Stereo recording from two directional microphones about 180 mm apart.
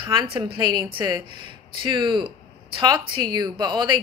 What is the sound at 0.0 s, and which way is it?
Speech, 25° right (ahead or behind).